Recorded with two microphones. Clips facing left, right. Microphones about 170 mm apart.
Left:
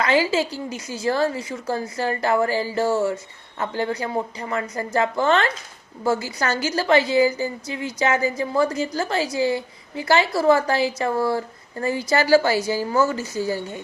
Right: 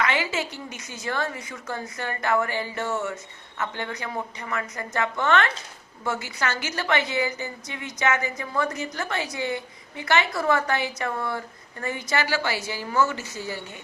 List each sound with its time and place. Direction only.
0.0 s a woman's voice: 35° left (ahead or behind)